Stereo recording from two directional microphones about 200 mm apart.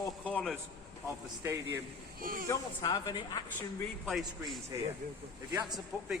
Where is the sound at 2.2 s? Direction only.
45° right (ahead or behind).